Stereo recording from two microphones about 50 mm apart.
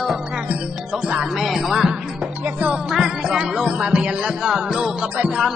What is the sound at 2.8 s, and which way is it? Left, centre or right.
Music, centre.